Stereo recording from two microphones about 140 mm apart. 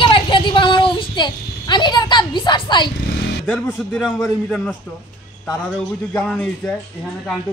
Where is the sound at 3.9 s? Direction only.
5° left (ahead or behind).